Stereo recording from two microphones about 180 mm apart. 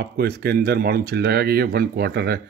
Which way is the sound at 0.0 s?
60° right (ahead or behind).